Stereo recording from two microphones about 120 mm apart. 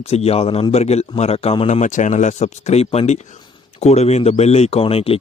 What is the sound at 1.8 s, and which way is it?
A man's voice, 90° left.